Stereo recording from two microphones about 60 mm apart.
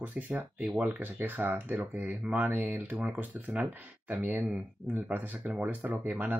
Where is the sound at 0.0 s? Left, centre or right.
Right.